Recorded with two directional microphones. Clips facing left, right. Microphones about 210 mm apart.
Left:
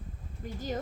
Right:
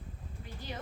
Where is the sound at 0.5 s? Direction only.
45° left (ahead or behind).